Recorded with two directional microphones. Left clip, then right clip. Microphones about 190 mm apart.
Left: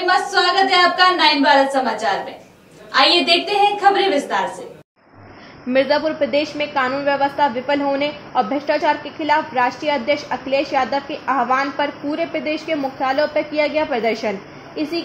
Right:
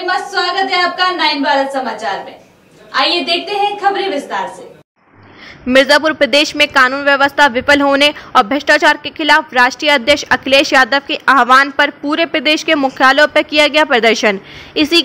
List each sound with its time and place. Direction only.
0.0 s a woman's voice: centre (ahead or behind)
5.7 s speech: 30° right (ahead or behind)